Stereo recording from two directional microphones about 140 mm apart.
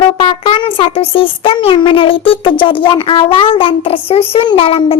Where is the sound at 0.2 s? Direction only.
40° left (ahead or behind).